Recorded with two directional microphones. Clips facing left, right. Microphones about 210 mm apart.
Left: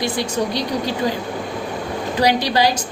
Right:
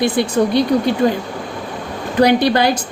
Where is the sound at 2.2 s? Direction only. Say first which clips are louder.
Right 5 dB; 55° right (ahead or behind).